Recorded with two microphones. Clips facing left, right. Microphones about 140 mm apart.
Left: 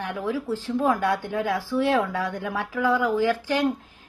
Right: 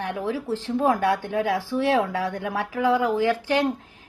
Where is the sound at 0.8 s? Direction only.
30° right (ahead or behind).